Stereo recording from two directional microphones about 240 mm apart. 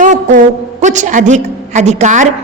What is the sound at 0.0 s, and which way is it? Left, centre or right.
A woman's voice, right.